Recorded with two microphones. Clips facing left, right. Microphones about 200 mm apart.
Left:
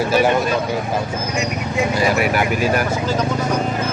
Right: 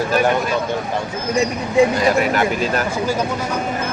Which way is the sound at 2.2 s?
10° left (ahead or behind).